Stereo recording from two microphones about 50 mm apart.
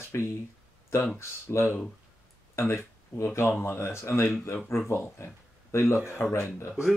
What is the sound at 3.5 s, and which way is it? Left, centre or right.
Speech, left.